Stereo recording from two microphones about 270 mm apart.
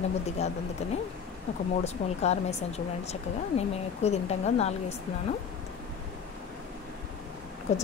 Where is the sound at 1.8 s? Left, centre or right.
Left.